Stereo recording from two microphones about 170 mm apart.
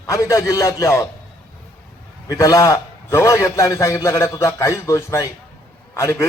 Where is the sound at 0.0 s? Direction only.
20° left (ahead or behind).